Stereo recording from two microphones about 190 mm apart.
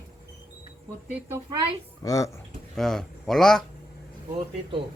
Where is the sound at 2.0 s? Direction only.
15° left (ahead or behind).